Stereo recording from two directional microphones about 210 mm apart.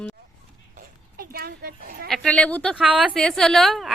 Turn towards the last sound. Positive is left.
turn(degrees=0)  # may be behind; listen again after turning